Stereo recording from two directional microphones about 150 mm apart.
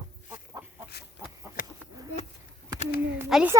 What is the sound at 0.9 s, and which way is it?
Chicken, 90° left.